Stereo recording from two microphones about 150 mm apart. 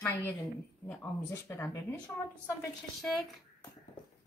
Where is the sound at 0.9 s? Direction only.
15° left (ahead or behind).